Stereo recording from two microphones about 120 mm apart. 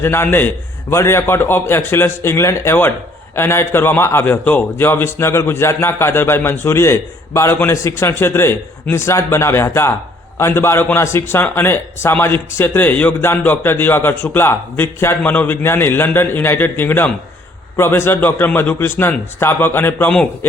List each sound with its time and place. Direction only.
0.0 s a man's voice: 20° left (ahead or behind)